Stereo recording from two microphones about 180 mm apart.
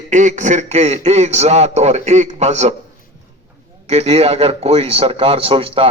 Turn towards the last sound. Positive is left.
turn(degrees=-30)  # may be behind; listen again after turning